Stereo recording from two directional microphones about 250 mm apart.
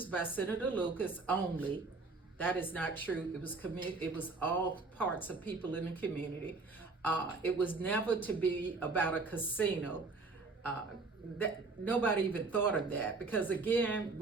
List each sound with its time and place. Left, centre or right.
0.0 s a woman's voice: centre
11.9 s a woman's voice: centre